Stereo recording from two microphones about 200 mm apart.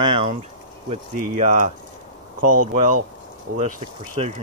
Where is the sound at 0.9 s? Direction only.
35° right (ahead or behind).